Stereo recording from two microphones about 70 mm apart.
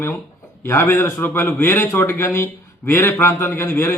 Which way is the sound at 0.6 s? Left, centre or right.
Left.